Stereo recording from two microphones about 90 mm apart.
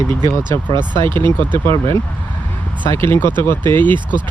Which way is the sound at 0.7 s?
60° right (ahead or behind).